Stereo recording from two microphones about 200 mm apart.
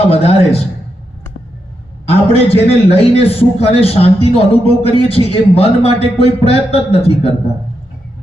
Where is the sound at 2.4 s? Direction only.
30° left (ahead or behind).